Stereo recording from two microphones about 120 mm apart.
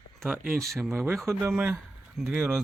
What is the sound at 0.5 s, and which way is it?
Speech, centre (ahead or behind).